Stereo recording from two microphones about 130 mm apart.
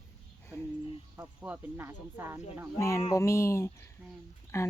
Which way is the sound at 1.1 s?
15° right (ahead or behind).